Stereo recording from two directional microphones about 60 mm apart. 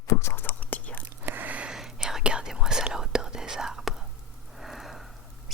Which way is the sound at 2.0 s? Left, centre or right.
Centre.